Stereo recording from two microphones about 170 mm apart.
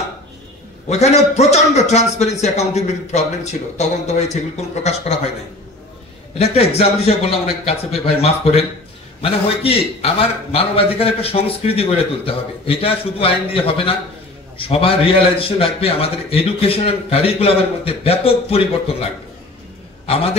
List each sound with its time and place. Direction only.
0.8 s a man's voice: 40° left (ahead or behind)
6.3 s a man's voice: 35° left (ahead or behind)